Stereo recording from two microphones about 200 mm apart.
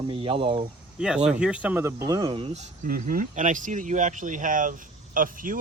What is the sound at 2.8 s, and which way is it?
Speech, 45° right (ahead or behind).